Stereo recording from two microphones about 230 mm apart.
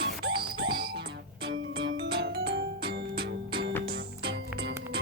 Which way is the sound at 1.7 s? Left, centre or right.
Right.